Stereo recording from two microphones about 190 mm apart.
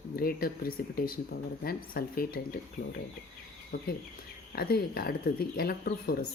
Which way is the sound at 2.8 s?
90° left.